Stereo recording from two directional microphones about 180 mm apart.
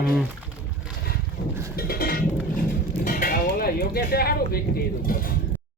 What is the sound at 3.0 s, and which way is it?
Speech, 50° left (ahead or behind).